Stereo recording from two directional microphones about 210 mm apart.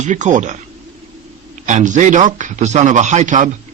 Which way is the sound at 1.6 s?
35° right (ahead or behind).